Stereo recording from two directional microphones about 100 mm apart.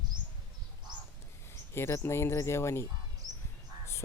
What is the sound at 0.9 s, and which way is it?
Crow, 45° right (ahead or behind).